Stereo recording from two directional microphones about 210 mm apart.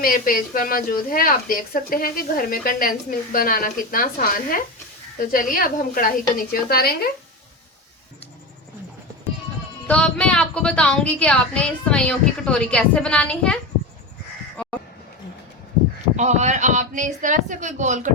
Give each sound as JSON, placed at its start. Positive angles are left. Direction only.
{"t": 0.0, "sound": "a woman's voice", "side_deg": 40}
{"t": 9.8, "sound": "speech", "side_deg": 5}
{"t": 14.6, "sound": "a sound", "side_deg": 5}
{"t": 16.1, "sound": "speech", "side_deg": -35}